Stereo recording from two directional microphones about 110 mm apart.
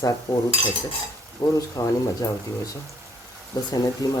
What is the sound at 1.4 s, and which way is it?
Speech, 45° left (ahead or behind).